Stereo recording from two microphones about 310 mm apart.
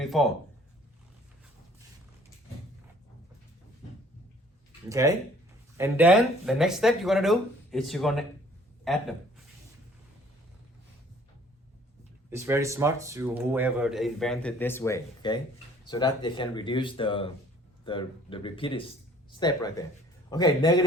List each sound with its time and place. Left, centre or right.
0.0 s a sound: centre
4.9 s a man's voice: centre
12.3 s speech: centre